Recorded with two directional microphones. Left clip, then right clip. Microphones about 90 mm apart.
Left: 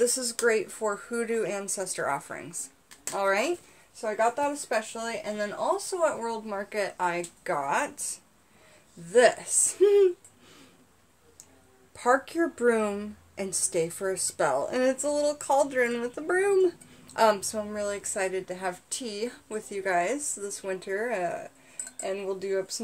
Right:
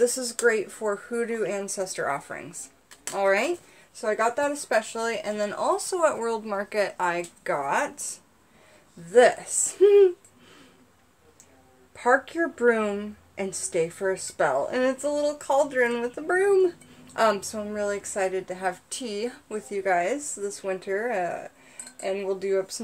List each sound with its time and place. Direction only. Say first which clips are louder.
0.0 s speech: right 3 dB; 10° left (ahead or behind)
4.0 s speech: right 2 dB; 10° right (ahead or behind)
4.5 s speech: right 4 dB; 35° right (ahead or behind)
4.9 s speech: right 4 dB; 75° right (ahead or behind)
7.0 s speech: right 2 dB; 20° right (ahead or behind)
7.4 s speech: right 2 dB; centre (ahead or behind)
9.1 s a woman's voice: right 3 dB; 20° left (ahead or behind)
11.9 s a woman's voice: right 2 dB; 35° left (ahead or behind)
22.0 s speech: right 4 dB; 10° left (ahead or behind)